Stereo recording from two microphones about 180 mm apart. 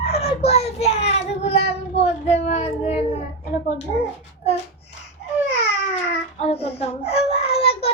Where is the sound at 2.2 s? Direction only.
35° left (ahead or behind).